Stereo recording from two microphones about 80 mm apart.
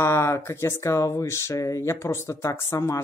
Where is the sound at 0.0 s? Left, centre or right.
Left.